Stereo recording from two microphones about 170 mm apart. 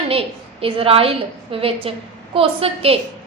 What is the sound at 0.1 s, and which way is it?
A woman's voice, 35° right (ahead or behind).